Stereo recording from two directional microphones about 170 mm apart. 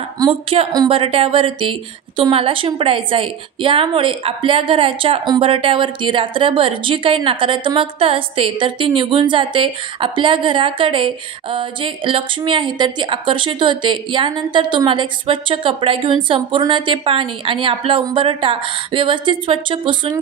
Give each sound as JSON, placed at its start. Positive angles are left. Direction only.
{"t": 0.3, "sound": "a woman's voice", "side_deg": -35}